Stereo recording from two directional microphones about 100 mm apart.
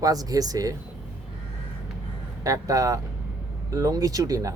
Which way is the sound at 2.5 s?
35° right (ahead or behind).